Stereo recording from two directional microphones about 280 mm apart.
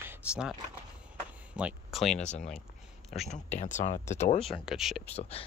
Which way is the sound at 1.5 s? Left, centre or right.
Centre.